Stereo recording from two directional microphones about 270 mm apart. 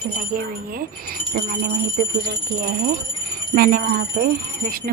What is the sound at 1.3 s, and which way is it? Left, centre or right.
A woman's voice, right.